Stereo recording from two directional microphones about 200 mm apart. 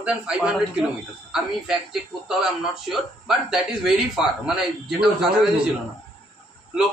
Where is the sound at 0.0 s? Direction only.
5° right (ahead or behind).